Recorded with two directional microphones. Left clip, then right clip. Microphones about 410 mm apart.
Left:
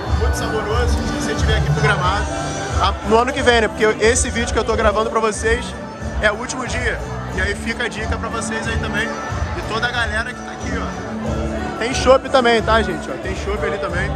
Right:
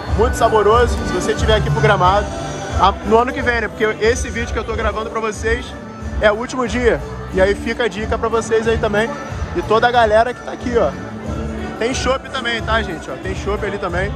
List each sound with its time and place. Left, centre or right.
0.4 s speech: centre